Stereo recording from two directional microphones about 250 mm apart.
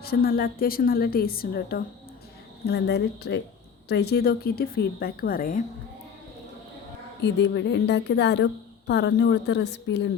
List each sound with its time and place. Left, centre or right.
0.0 s a woman's voice: left
7.2 s a woman's voice: left